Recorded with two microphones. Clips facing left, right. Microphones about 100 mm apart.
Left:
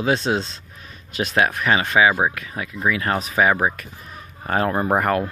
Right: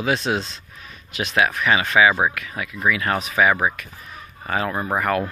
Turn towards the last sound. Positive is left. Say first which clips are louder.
# left 3 dB
turn(degrees=40)  # may be behind; listen again after turning